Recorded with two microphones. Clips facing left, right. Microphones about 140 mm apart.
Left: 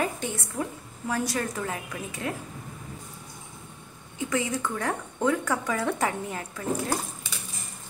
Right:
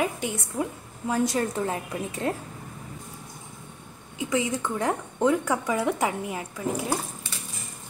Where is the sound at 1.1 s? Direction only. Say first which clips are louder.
Right 4 dB; 25° right (ahead or behind).